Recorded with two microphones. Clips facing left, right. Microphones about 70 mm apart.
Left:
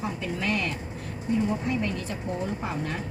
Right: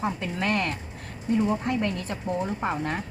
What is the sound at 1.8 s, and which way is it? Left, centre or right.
A woman's voice, right.